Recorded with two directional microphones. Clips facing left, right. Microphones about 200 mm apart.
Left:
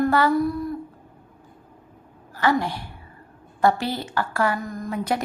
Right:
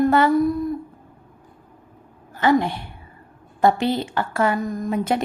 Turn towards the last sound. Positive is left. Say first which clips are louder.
# right 4 dB
turn(degrees=-25)  # may be behind; listen again after turning